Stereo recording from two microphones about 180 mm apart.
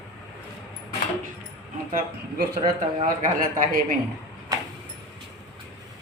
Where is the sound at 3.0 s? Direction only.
50° right (ahead or behind).